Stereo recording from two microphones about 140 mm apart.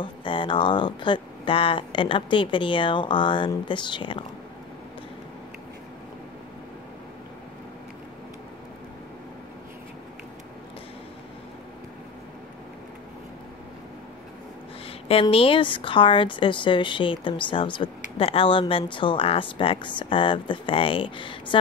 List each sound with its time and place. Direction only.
0.0 s a woman's voice: 35° left (ahead or behind)
14.9 s a woman's voice: 40° left (ahead or behind)